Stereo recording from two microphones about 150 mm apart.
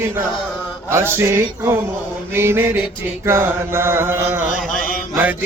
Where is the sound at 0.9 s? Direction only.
15° right (ahead or behind).